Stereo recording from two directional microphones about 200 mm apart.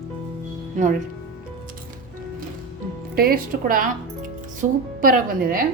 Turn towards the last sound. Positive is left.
turn(degrees=-45)  # may be behind; listen again after turning